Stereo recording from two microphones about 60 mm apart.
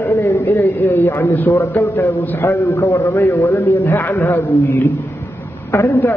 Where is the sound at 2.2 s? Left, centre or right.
Left.